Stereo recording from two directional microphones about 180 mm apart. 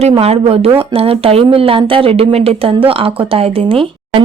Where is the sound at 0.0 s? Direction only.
35° right (ahead or behind).